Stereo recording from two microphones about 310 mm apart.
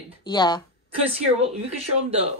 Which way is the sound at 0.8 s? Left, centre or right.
Centre.